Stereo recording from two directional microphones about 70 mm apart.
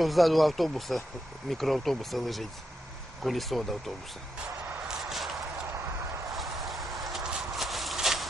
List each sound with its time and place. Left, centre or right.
0.0 s speech: centre
4.8 s a sound: centre
6.3 s horse: centre